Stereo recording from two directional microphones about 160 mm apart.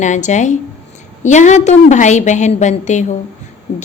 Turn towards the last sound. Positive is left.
turn(degrees=45)  # may be behind; listen again after turning